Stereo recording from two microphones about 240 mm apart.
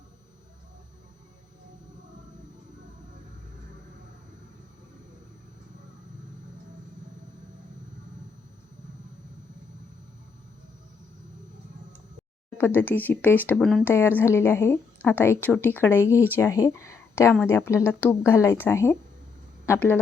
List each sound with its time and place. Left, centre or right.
12.5 s speech: centre